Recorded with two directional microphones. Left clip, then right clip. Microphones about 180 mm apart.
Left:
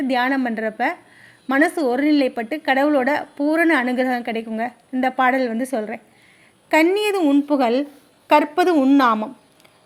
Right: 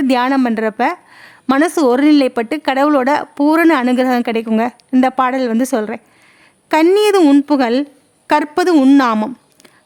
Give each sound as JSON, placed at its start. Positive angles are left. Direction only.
{"t": 0.0, "sound": "a woman's voice", "side_deg": -35}